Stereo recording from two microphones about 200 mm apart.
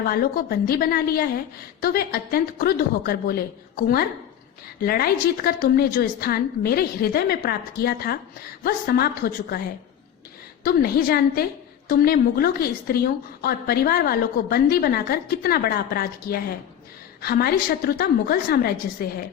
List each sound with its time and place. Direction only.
0.1 s a woman's voice: 50° left (ahead or behind)
4.8 s a woman's voice: 50° left (ahead or behind)
10.6 s a woman's voice: 50° left (ahead or behind)